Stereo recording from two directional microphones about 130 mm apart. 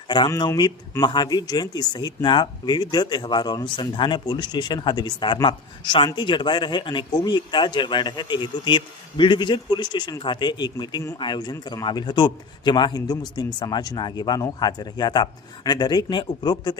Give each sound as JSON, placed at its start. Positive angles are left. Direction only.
{"t": 0.3, "sound": "a man's voice", "side_deg": 30}